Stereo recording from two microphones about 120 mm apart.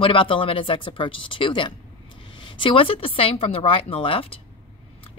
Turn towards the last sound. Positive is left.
turn(degrees=50)  # may be behind; listen again after turning